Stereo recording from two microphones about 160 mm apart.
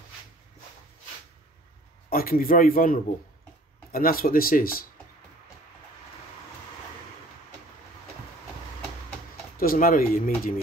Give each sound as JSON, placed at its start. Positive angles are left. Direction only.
{"t": 2.0, "sound": "speech", "side_deg": 65}
{"t": 9.6, "sound": "speech", "side_deg": 65}